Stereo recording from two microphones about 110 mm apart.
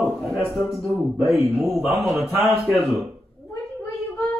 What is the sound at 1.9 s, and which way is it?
Speech, 5° right (ahead or behind).